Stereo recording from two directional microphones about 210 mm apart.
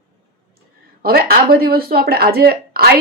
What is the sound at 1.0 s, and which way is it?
Speech, 45° right (ahead or behind).